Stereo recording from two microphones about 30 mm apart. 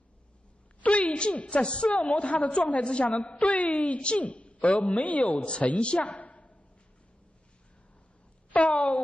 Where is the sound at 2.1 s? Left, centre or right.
Left.